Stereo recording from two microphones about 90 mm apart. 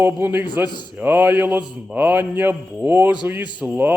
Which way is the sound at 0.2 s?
20° right (ahead or behind).